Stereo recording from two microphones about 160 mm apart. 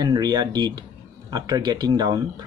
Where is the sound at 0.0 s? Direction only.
25° right (ahead or behind).